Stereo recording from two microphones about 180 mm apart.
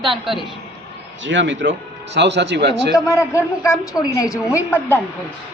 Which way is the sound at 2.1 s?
75° right (ahead or behind).